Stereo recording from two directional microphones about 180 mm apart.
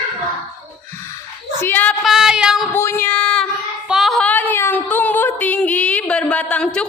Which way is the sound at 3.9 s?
Centre (ahead or behind).